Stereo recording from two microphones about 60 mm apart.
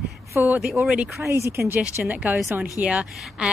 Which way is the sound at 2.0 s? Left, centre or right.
Right.